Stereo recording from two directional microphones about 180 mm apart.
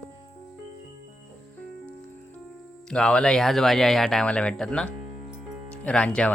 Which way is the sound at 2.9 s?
5° left (ahead or behind).